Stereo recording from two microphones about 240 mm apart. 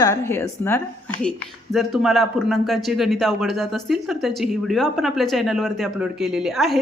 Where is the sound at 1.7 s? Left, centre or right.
Centre.